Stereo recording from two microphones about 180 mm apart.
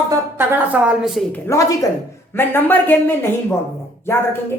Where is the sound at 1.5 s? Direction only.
15° left (ahead or behind).